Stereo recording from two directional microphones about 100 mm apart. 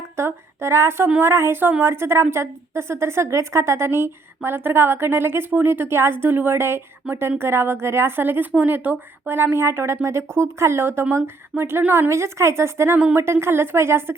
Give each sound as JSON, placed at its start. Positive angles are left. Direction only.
{"t": 0.2, "sound": "a woman's voice", "side_deg": -25}